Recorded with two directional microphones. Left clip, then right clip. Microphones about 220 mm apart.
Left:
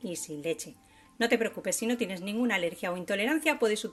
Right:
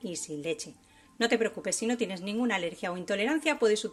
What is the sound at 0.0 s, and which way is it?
Speech, centre (ahead or behind).